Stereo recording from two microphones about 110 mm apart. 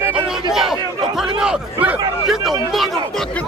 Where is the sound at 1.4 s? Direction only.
10° right (ahead or behind).